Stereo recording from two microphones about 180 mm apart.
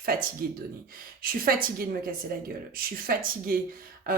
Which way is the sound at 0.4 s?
55° right (ahead or behind).